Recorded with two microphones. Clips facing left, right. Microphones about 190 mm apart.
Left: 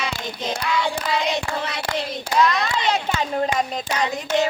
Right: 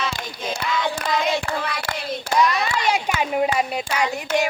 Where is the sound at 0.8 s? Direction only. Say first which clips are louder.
Even; 20° left (ahead or behind).